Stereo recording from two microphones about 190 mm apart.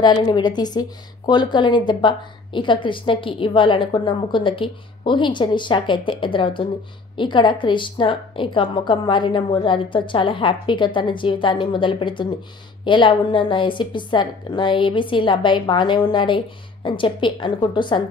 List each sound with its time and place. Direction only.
0.0 s a woman's voice: 25° left (ahead or behind)